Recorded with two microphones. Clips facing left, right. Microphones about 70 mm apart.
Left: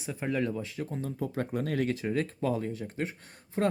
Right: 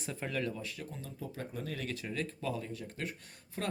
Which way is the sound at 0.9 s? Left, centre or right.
Left.